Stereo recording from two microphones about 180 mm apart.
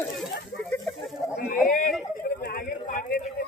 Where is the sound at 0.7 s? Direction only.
Centre (ahead or behind).